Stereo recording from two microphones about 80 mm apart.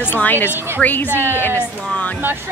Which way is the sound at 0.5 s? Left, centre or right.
Right.